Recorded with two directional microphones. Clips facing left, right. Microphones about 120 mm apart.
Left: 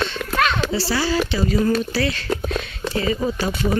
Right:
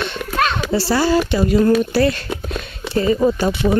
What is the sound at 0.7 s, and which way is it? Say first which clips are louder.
Speech: right 5 dB; 55° right (ahead or behind).